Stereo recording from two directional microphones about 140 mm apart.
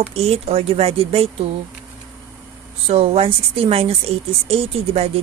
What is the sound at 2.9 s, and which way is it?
A woman's voice, 45° right (ahead or behind).